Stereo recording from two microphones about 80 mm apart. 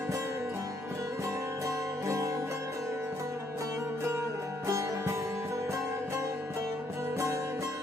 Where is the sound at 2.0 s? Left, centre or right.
Right.